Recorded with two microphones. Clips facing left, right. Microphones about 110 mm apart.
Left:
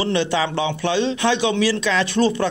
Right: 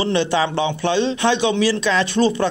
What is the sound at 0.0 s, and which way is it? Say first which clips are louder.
A man's voice: right 2 dB; 30° right (ahead or behind).